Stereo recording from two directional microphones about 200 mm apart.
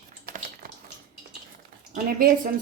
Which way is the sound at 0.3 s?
45° right (ahead or behind).